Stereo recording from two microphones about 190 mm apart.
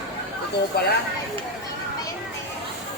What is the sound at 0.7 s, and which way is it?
Speech, 55° left (ahead or behind).